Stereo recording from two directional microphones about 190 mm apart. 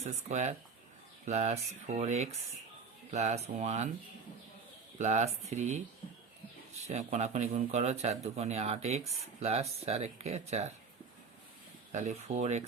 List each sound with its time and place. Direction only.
0.0 s speech: 35° right (ahead or behind)
4.9 s speech: 35° right (ahead or behind)
11.9 s speech: 40° right (ahead or behind)